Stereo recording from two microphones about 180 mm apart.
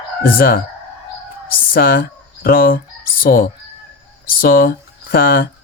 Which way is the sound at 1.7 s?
55° left (ahead or behind).